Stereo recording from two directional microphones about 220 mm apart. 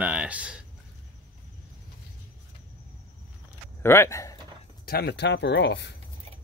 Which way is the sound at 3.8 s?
10° left (ahead or behind).